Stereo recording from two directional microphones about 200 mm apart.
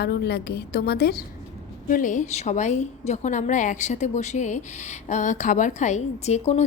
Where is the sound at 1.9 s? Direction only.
40° left (ahead or behind).